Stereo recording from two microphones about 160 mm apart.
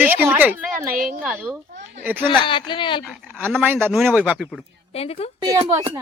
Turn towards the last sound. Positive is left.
turn(degrees=-25)  # may be behind; listen again after turning